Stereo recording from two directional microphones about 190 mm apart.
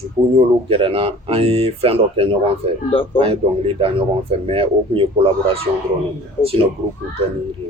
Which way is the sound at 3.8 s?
30° right (ahead or behind).